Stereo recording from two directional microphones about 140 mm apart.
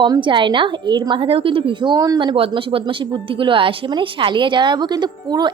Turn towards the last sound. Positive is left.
turn(degrees=-30)  # may be behind; listen again after turning